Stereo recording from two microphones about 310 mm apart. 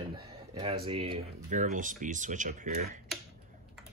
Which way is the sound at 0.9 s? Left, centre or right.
Centre.